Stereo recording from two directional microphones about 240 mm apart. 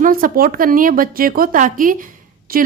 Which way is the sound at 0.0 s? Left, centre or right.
Right.